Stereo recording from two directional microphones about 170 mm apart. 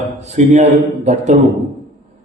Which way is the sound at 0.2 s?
40° right (ahead or behind).